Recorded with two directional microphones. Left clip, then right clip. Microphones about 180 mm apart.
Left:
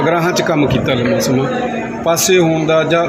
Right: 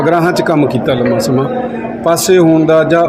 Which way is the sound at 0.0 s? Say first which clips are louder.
Right 3 dB; 55° right (ahead or behind).